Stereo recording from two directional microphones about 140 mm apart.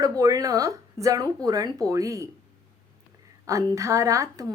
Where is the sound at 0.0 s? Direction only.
25° right (ahead or behind).